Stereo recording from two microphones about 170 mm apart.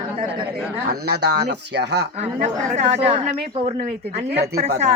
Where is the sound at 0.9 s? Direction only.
70° right (ahead or behind).